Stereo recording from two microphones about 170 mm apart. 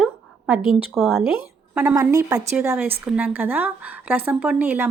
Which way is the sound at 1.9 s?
20° right (ahead or behind).